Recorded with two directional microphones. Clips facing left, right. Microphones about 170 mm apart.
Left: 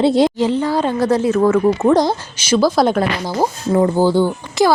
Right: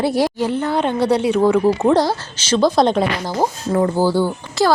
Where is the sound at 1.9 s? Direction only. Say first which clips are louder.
Left 2 dB; 15° left (ahead or behind).